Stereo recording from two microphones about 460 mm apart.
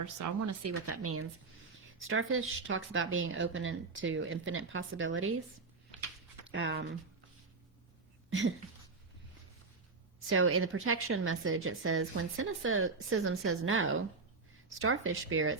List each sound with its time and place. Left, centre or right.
0.0 s a woman's voice: right
6.5 s a woman's voice: right
8.3 s a sound: right
10.2 s a woman's voice: right